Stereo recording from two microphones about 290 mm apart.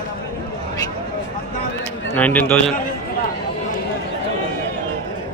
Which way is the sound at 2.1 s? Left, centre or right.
Centre.